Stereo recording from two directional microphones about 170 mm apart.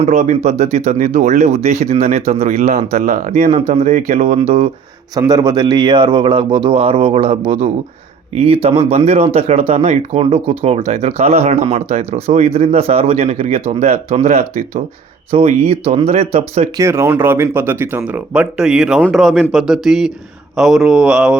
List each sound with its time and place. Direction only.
0.0 s speech: 40° right (ahead or behind)
5.3 s speech: 25° right (ahead or behind)
16.7 s speech: 15° right (ahead or behind)